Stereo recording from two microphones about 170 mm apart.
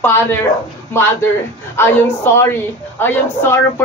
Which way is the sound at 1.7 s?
15° left (ahead or behind).